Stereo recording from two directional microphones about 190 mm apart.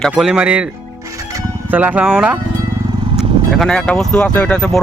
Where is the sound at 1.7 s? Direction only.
10° right (ahead or behind).